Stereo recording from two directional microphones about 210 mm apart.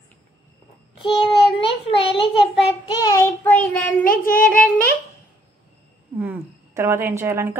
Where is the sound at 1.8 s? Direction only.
25° left (ahead or behind).